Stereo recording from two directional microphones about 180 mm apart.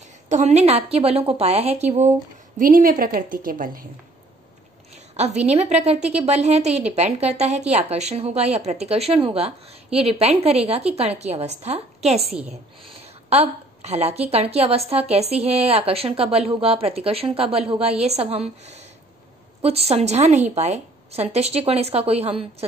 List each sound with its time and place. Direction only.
0.3 s a woman's voice: 40° right (ahead or behind)
2.6 s a woman's voice: 50° right (ahead or behind)
5.1 s a woman's voice: 40° right (ahead or behind)
19.6 s a woman's voice: 35° right (ahead or behind)